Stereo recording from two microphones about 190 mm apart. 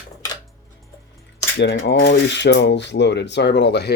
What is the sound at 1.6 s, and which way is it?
Speech, 60° left (ahead or behind).